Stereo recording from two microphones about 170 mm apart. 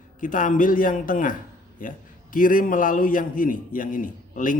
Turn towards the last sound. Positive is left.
turn(degrees=50)  # may be behind; listen again after turning